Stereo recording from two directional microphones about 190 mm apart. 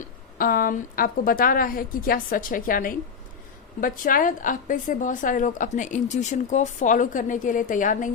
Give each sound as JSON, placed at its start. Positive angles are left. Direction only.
{"t": 0.3, "sound": "a woman's voice", "side_deg": 50}